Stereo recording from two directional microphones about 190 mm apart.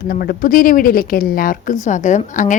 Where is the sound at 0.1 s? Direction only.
50° left (ahead or behind).